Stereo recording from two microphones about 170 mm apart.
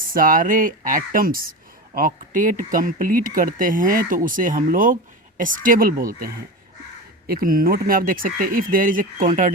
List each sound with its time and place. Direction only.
0.1 s speech: 55° right (ahead or behind)